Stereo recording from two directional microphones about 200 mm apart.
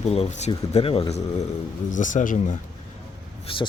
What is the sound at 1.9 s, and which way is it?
Speech, 40° left (ahead or behind).